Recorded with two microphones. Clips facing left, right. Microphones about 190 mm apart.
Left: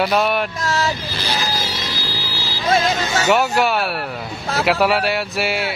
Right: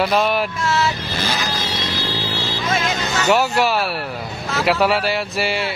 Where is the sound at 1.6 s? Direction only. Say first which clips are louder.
Right 2 dB; 25° right (ahead or behind).